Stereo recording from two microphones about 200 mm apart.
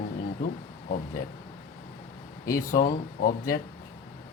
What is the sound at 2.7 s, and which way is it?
Speech, 45° left (ahead or behind).